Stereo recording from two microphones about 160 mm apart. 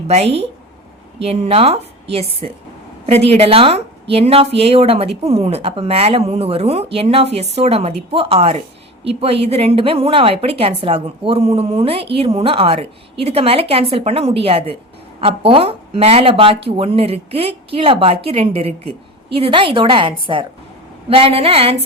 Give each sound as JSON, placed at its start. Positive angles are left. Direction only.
{"t": 0.1, "sound": "speech", "side_deg": -40}